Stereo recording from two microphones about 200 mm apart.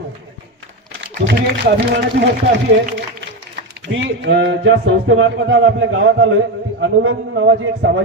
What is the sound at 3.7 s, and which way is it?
Speech, 65° right (ahead or behind).